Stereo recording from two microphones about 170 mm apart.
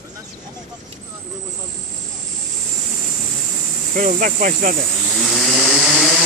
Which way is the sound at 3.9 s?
50° right (ahead or behind).